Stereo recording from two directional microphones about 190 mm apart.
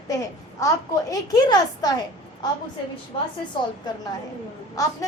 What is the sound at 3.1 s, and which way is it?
Speech, 25° left (ahead or behind).